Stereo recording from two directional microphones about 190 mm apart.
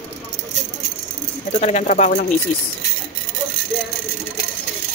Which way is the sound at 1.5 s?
40° left (ahead or behind).